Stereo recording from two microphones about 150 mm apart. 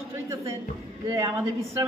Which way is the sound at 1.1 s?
20° right (ahead or behind).